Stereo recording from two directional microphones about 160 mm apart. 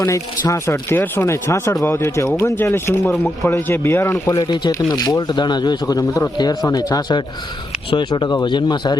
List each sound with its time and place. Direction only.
0.0 s speech: 20° left (ahead or behind)